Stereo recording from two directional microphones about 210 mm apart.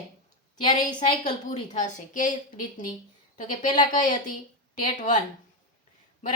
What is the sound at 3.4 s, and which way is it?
Speech, 40° left (ahead or behind).